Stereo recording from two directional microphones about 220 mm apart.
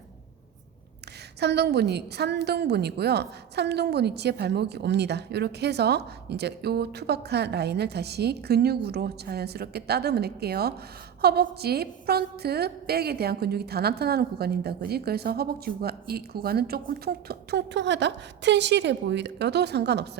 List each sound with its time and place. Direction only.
1.4 s a woman's voice: 50° right (ahead or behind)